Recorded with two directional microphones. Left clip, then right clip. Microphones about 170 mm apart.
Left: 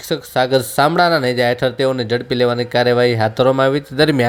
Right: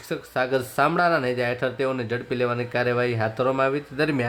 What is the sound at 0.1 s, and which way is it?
Speech, 30° left (ahead or behind).